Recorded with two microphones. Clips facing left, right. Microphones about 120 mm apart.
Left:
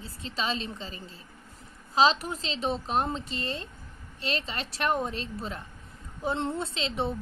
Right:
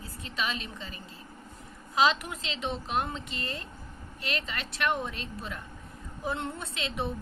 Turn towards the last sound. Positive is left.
turn(degrees=25)  # may be behind; listen again after turning